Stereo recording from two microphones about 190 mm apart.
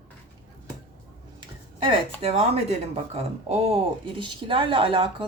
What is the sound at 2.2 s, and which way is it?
A woman's voice, 30° right (ahead or behind).